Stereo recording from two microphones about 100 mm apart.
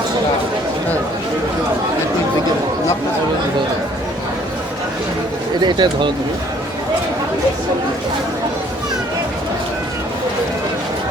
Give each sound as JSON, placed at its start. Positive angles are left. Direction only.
{"t": 5.6, "sound": "speech", "side_deg": -50}